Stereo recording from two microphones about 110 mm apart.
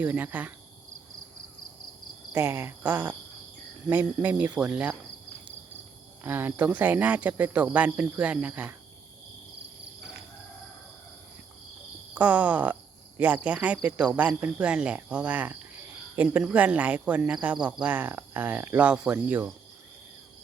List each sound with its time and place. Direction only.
0.0 s speech: 15° right (ahead or behind)
2.3 s speech: 20° right (ahead or behind)
6.2 s speech: 20° right (ahead or behind)
12.1 s speech: 15° right (ahead or behind)